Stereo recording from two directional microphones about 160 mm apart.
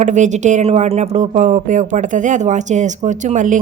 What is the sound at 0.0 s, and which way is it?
A woman's voice, 50° right (ahead or behind).